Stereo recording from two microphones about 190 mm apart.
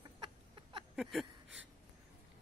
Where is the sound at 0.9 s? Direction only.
Centre (ahead or behind).